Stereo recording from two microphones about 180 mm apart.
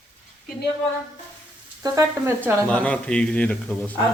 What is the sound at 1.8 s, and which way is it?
Speech, 15° right (ahead or behind).